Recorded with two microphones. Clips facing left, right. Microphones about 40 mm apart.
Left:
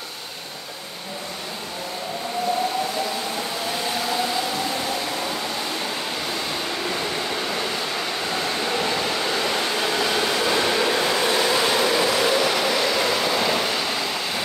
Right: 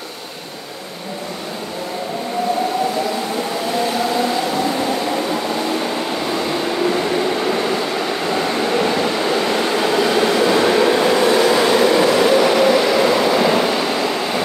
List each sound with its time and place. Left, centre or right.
7.1 s train: centre